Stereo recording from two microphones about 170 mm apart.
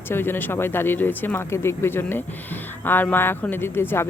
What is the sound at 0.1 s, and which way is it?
Speech, 15° left (ahead or behind).